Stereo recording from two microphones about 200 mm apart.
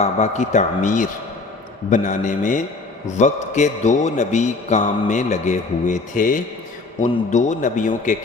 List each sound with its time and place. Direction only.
0.0 s a man's voice: 35° left (ahead or behind)